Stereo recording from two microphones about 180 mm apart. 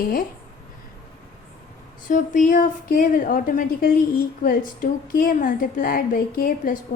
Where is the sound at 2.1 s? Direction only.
45° left (ahead or behind).